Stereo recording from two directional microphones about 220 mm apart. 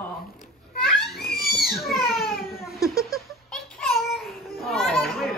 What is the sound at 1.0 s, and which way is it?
Cat, centre (ahead or behind).